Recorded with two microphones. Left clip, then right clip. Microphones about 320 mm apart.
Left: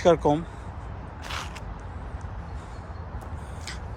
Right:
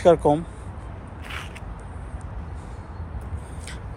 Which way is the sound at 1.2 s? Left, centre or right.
Centre.